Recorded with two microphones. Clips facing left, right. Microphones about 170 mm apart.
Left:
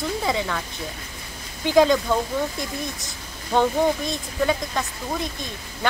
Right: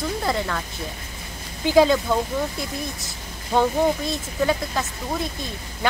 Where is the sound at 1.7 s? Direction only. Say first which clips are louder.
Right 1 dB; 5° right (ahead or behind).